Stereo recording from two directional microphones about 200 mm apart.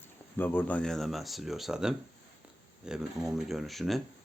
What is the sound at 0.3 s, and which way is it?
Speech, 10° left (ahead or behind).